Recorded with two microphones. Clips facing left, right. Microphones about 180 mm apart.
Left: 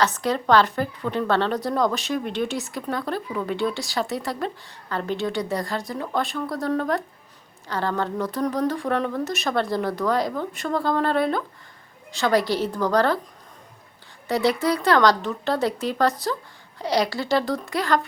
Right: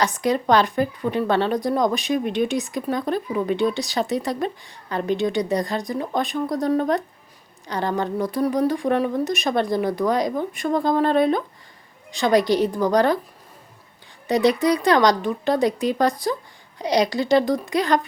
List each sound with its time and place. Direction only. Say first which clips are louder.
0.0 s speech: right 2 dB; 15° right (ahead or behind)
14.3 s speech: right 3 dB; 20° right (ahead or behind)